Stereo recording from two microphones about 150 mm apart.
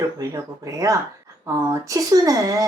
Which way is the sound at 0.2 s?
20° right (ahead or behind).